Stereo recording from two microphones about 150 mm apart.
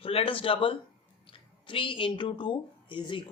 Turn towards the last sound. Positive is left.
turn(degrees=35)  # may be behind; listen again after turning